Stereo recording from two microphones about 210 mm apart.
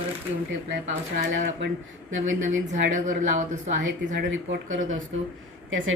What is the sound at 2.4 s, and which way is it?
A woman's voice, 35° right (ahead or behind).